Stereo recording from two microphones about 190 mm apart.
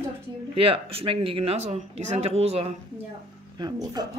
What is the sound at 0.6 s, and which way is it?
Speech, 30° right (ahead or behind).